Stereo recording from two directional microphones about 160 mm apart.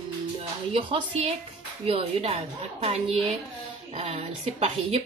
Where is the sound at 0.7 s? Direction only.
40° right (ahead or behind).